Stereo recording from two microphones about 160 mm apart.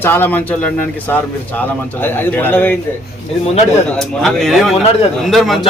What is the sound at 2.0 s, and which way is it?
Speech, 15° left (ahead or behind).